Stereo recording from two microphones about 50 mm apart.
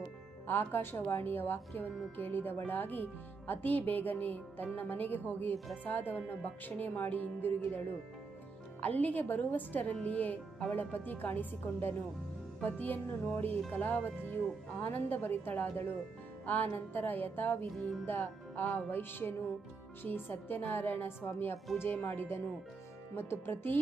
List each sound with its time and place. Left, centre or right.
0.4 s speech: left
8.8 s a woman's voice: left